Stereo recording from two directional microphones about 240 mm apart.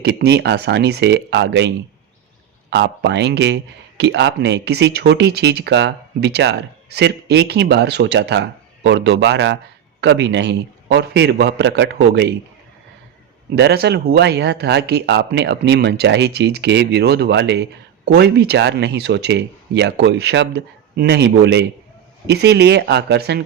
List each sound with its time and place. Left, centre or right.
0.0 s speech: right
13.6 s speech: right